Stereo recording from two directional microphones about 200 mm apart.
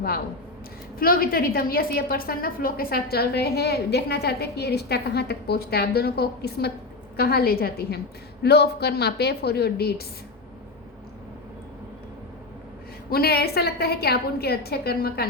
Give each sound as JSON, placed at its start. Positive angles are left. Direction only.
{"t": 0.9, "sound": "a woman's voice", "side_deg": 45}
{"t": 13.1, "sound": "a woman's voice", "side_deg": 50}